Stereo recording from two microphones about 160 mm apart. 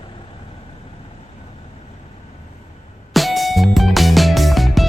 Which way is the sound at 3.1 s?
Centre (ahead or behind).